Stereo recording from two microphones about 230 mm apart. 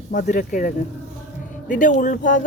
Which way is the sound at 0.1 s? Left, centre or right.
Left.